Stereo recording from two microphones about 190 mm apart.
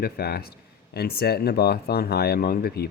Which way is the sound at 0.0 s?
55° left (ahead or behind).